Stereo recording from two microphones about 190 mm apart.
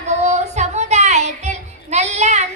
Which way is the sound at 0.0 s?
35° right (ahead or behind).